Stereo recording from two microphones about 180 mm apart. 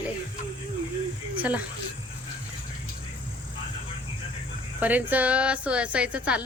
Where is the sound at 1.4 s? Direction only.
10° right (ahead or behind).